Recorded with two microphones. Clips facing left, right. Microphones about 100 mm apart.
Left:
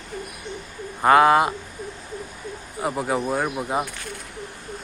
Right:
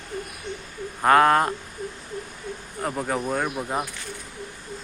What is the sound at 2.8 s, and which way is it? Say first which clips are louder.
Speech: left 3 dB; 5° left (ahead or behind).